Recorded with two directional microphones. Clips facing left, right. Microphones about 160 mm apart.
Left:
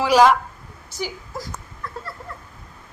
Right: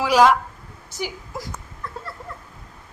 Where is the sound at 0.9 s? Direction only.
20° right (ahead or behind).